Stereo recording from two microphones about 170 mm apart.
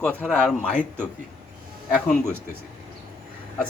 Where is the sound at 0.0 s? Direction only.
5° left (ahead or behind).